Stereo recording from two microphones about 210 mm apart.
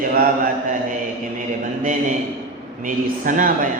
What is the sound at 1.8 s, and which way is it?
Speech, 40° right (ahead or behind).